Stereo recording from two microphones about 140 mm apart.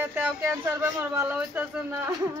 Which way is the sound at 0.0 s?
15° right (ahead or behind).